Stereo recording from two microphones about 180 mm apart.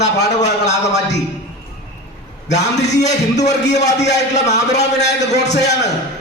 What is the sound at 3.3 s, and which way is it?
A man's voice, 70° left (ahead or behind).